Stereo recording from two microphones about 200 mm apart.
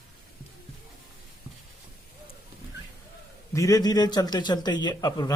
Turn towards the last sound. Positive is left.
turn(degrees=20)  # may be behind; listen again after turning